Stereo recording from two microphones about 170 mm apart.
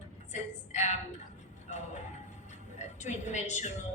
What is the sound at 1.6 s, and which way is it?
Music, 40° left (ahead or behind).